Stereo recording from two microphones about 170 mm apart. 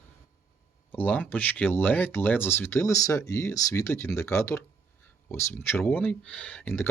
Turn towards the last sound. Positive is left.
turn(degrees=10)  # may be behind; listen again after turning